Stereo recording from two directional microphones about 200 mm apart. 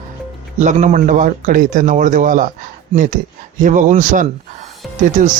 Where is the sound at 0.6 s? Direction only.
40° right (ahead or behind).